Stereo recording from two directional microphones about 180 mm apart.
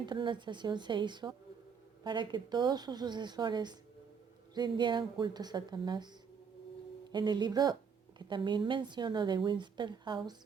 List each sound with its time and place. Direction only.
0.0 s a woman's voice: 25° right (ahead or behind)
7.1 s a woman's voice: 25° right (ahead or behind)